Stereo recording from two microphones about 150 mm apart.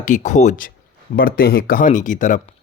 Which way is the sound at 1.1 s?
85° left.